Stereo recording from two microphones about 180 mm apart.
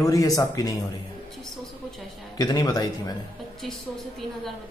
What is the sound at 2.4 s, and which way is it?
Speech, 20° left (ahead or behind).